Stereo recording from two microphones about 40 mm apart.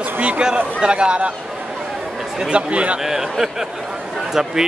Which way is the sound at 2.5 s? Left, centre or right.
Right.